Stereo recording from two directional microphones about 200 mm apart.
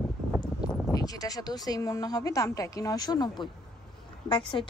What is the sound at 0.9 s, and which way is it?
A woman's voice, 20° left (ahead or behind).